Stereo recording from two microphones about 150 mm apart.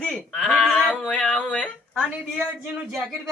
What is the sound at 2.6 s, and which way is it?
Speech, 15° right (ahead or behind).